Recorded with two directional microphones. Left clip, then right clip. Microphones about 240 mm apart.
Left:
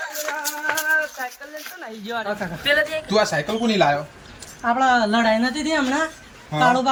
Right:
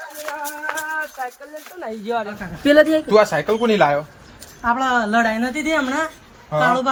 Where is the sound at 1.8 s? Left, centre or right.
Right.